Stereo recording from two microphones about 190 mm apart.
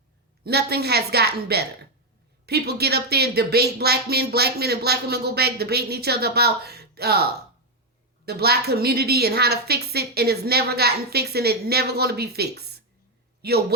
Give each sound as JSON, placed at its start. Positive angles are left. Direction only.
{"t": 0.4, "sound": "speech", "side_deg": -60}